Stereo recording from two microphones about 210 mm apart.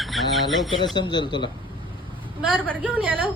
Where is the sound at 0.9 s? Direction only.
20° left (ahead or behind).